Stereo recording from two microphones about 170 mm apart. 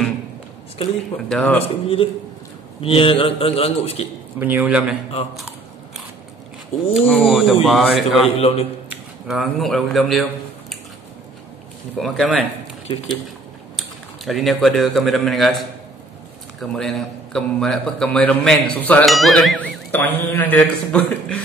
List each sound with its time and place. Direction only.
1.3 s a man's voice: 10° left (ahead or behind)
1.6 s a man's voice: 35° left (ahead or behind)
4.4 s a man's voice: 10° right (ahead or behind)
6.9 s a man's voice: centre (ahead or behind)
8.4 s a man's voice: 35° left (ahead or behind)
9.3 s a man's voice: centre (ahead or behind)
12.0 s a man's voice: centre (ahead or behind)
13.7 s speech: centre (ahead or behind)
16.7 s a man's voice: 5° left (ahead or behind)